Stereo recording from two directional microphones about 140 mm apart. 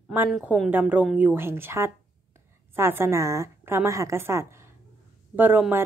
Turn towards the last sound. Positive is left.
turn(degrees=-15)  # may be behind; listen again after turning